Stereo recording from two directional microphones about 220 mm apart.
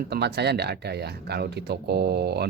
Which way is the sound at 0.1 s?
50° right (ahead or behind).